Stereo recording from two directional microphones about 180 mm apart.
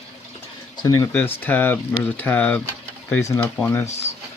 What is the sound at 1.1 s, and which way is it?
Speech, 10° left (ahead or behind).